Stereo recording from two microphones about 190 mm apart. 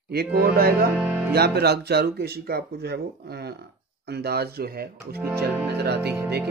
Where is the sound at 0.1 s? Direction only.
55° right (ahead or behind).